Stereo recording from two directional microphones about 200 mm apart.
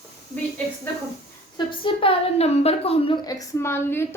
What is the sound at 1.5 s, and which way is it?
A woman's voice, 25° left (ahead or behind).